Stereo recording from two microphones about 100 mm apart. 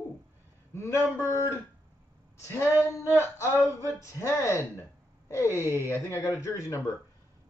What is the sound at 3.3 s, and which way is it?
A woman's voice, 30° left (ahead or behind).